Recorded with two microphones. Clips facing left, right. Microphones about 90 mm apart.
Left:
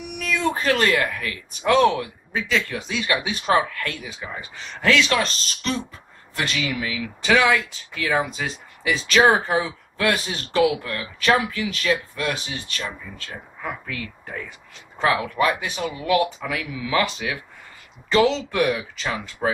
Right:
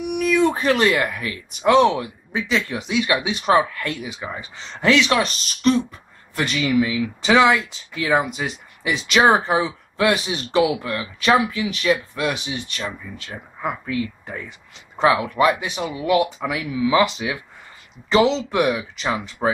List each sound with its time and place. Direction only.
0.2 s speech: 10° right (ahead or behind)
18.1 s speech: 20° right (ahead or behind)